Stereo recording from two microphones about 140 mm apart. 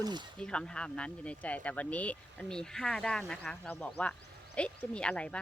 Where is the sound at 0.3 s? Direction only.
5° left (ahead or behind).